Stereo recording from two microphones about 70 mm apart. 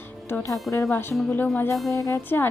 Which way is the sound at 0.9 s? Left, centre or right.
Left.